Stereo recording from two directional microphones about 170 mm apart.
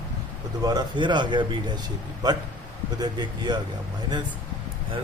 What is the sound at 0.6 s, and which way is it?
A man's voice, 25° right (ahead or behind).